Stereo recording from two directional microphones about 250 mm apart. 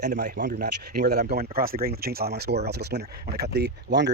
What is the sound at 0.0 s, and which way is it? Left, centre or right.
Speech, right.